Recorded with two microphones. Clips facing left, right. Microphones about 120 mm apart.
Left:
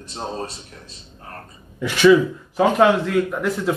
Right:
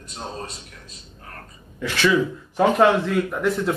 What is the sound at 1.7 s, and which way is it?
Speech, 15° left (ahead or behind).